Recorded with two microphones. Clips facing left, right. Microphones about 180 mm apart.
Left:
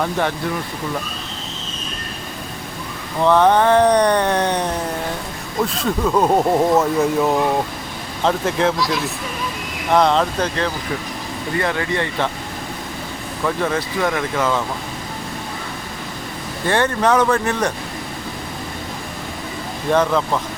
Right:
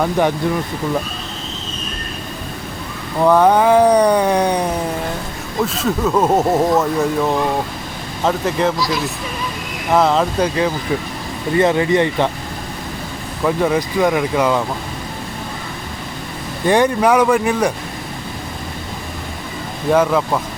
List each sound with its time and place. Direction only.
0.0 s speech: 15° right (ahead or behind)
3.2 s speech: 10° right (ahead or behind)
11.5 s speech: 20° right (ahead or behind)
13.4 s speech: 15° right (ahead or behind)
16.6 s speech: 15° right (ahead or behind)
19.9 s speech: 10° right (ahead or behind)